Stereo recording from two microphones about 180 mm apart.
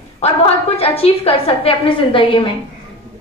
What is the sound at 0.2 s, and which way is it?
A woman's voice, 35° left (ahead or behind).